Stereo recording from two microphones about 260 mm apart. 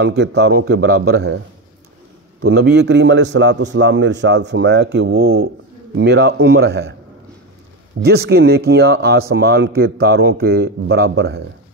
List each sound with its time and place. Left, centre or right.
0.0 s a man's voice: right
2.4 s a man's voice: right
8.0 s a man's voice: right